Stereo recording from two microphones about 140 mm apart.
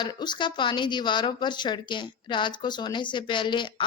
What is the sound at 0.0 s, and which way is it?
A woman's voice, 30° left (ahead or behind).